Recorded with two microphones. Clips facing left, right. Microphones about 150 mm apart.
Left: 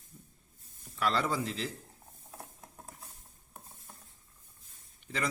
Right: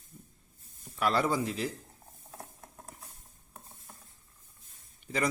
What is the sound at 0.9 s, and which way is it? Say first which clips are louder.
Speech: right 3 dB; 15° right (ahead or behind).